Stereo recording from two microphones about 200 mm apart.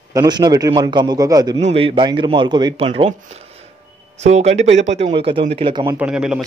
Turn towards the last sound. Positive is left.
turn(degrees=-5)  # may be behind; listen again after turning